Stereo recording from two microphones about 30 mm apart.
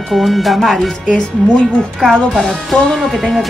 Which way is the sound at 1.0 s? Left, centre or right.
Left.